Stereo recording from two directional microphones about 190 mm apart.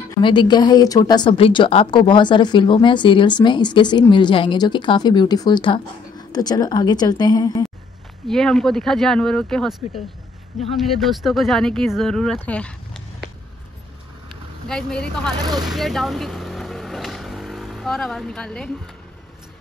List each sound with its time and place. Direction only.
0.2 s speech: 25° left (ahead or behind)
8.3 s speech: 5° left (ahead or behind)
14.7 s speech: 5° left (ahead or behind)
15.3 s speech: 20° right (ahead or behind)
15.6 s vehicle: centre (ahead or behind)